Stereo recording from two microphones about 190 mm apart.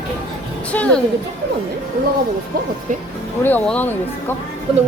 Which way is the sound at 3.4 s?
10° left (ahead or behind).